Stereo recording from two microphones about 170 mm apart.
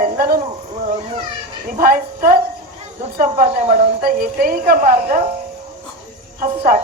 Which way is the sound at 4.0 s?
60° right (ahead or behind).